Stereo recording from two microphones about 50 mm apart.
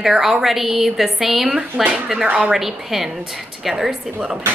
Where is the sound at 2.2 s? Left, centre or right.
Centre.